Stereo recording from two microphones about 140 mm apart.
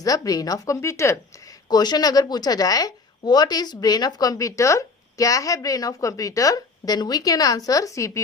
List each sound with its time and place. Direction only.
0.0 s a woman's voice: 25° left (ahead or behind)